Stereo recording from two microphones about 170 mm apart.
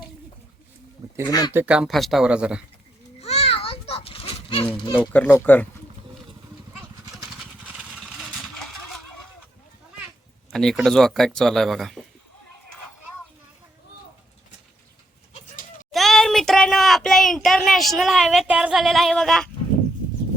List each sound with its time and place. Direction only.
1.3 s speech: 20° left (ahead or behind)
1.5 s speech: 5° right (ahead or behind)
3.2 s children playing: 40° left (ahead or behind)
4.9 s speech: 10° left (ahead or behind)
7.3 s vehicle: 5° right (ahead or behind)
10.5 s speech: centre (ahead or behind)
15.9 s a sound: centre (ahead or behind)